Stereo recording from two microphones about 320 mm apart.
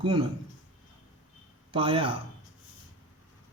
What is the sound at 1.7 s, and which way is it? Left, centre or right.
Speech, centre.